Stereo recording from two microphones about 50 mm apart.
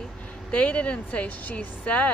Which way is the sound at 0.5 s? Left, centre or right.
Left.